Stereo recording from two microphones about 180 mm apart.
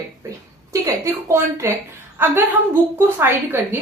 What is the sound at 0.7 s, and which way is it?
A woman's voice, 15° right (ahead or behind).